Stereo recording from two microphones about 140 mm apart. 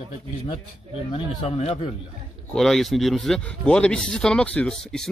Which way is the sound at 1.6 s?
50° left (ahead or behind).